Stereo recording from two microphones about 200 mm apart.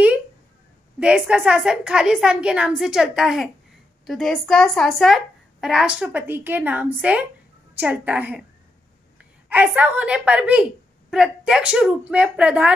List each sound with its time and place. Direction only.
0.9 s a woman's voice: 5° right (ahead or behind)